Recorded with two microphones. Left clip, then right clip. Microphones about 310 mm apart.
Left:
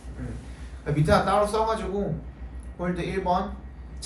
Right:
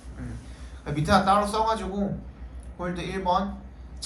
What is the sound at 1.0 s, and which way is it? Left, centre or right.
Speech, centre.